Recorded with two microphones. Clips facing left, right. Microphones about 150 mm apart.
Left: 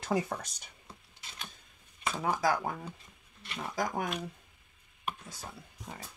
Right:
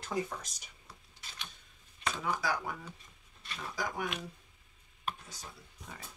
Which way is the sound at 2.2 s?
45° left (ahead or behind).